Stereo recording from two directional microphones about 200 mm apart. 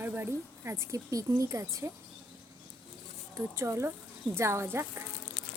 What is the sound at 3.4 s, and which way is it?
Speech, 15° right (ahead or behind).